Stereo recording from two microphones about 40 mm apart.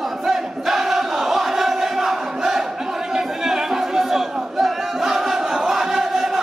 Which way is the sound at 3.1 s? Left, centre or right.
Centre.